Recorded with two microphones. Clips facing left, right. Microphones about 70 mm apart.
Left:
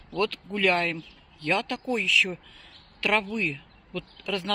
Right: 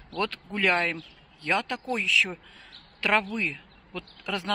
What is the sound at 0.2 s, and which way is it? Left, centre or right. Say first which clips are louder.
Speech: left 2 dB; right.